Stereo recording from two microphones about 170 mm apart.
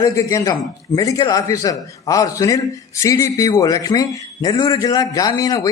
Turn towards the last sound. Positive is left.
turn(degrees=20)  # may be behind; listen again after turning